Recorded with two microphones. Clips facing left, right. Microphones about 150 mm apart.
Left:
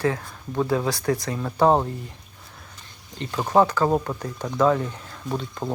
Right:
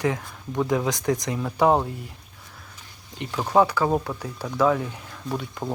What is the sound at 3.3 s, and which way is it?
Speech, 10° left (ahead or behind).